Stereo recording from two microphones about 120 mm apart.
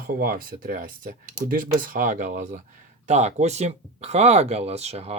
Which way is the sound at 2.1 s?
90° right.